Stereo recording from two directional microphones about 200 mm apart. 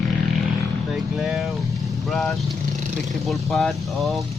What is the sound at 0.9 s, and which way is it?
Vehicle, centre (ahead or behind).